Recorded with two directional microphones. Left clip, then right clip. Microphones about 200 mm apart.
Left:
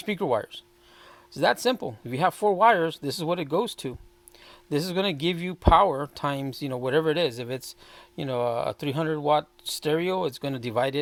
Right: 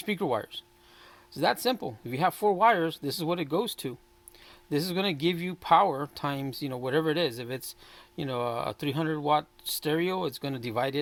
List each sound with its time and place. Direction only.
0.0 s speech: 35° left (ahead or behind)